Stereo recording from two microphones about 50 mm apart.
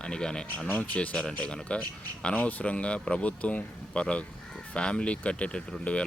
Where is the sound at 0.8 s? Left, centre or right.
Left.